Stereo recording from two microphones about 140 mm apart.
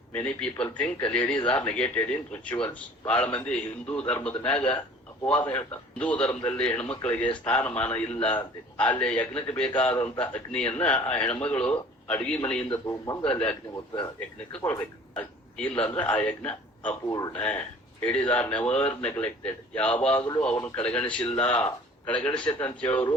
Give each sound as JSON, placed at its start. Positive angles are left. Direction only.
{"t": 0.1, "sound": "a man's voice", "side_deg": 5}
{"t": 12.7, "sound": "speech", "side_deg": 25}
{"t": 13.2, "sound": "a man's voice", "side_deg": 10}
{"t": 13.7, "sound": "a man's voice", "side_deg": 30}
{"t": 15.1, "sound": "a man's voice", "side_deg": 10}
{"t": 17.1, "sound": "speech", "side_deg": 25}
{"t": 17.3, "sound": "a man's voice", "side_deg": 10}